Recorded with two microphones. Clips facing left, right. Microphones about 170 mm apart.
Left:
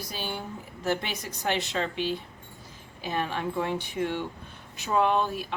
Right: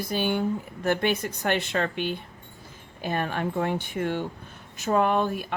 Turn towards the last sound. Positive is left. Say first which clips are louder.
# right 1 dB
turn(degrees=-50)  # may be behind; listen again after turning